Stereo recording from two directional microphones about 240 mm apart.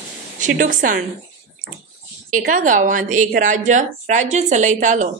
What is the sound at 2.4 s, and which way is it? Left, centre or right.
A woman's voice, right.